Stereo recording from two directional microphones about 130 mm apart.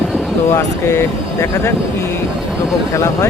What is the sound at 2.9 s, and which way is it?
Speech, 25° left (ahead or behind).